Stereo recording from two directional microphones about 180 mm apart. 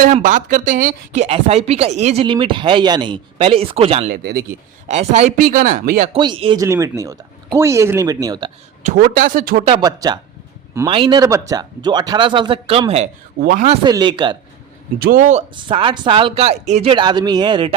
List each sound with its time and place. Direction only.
0.0 s speech: 45° right (ahead or behind)
5.5 s speech: 55° right (ahead or behind)
6.1 s a man's voice: 25° right (ahead or behind)
8.8 s speech: 50° right (ahead or behind)
9.6 s a man's voice: 25° right (ahead or behind)
13.4 s speech: 50° right (ahead or behind)
13.8 s a man's voice: 25° right (ahead or behind)
14.9 s speech: 55° right (ahead or behind)
15.5 s a man's voice: 30° right (ahead or behind)